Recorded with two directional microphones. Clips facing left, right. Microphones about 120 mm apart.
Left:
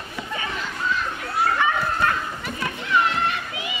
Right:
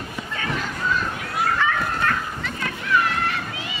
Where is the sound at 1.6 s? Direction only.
20° left (ahead or behind).